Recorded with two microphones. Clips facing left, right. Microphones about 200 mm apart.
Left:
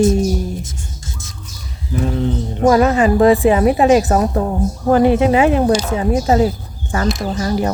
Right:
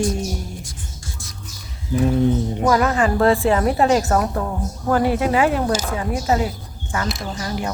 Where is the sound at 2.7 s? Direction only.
25° left (ahead or behind).